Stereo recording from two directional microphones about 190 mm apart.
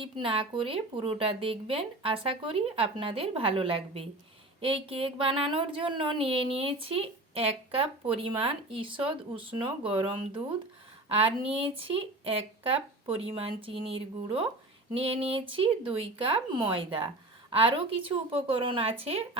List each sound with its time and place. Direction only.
0.0 s speech: 25° right (ahead or behind)